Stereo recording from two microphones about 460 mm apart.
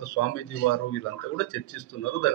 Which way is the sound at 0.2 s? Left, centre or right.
Left.